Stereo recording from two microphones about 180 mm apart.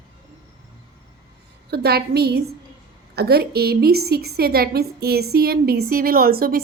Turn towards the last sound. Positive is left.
turn(degrees=-55)  # may be behind; listen again after turning